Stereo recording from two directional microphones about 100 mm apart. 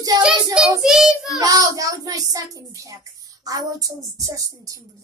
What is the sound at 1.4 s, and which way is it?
A child's voice, 40° right (ahead or behind).